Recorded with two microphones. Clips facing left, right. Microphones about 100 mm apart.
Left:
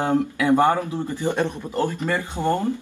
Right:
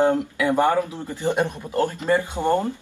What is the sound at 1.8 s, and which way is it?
Speech, 20° right (ahead or behind).